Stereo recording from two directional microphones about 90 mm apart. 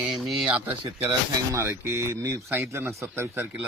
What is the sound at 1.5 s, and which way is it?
A man's voice, 30° right (ahead or behind).